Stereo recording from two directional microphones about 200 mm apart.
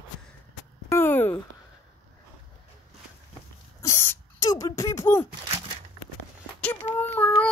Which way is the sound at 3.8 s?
15° left (ahead or behind).